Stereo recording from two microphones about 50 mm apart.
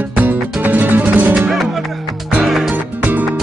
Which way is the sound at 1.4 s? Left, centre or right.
Centre.